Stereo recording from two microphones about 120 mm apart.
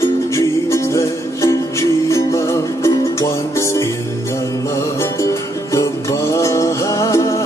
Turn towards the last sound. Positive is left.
turn(degrees=25)  # may be behind; listen again after turning